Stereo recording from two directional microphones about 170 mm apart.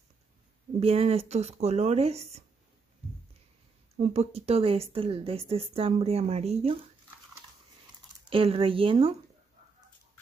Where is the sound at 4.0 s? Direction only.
40° right (ahead or behind).